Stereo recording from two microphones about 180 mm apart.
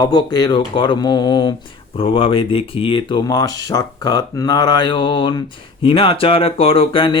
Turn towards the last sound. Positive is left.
turn(degrees=30)  # may be behind; listen again after turning